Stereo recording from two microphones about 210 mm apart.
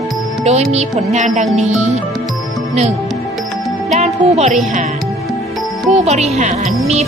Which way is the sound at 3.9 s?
30° right (ahead or behind).